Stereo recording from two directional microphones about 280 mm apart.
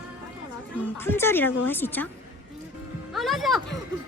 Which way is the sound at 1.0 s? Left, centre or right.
Centre.